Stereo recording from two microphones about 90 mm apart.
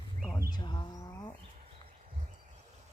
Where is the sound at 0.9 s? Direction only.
45° left (ahead or behind).